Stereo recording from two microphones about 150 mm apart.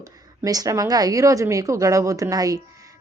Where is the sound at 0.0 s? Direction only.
25° right (ahead or behind).